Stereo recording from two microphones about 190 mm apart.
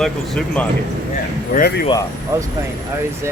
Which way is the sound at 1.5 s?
50° left (ahead or behind).